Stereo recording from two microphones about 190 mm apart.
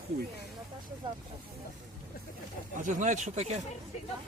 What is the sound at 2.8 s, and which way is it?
Speech, 40° right (ahead or behind).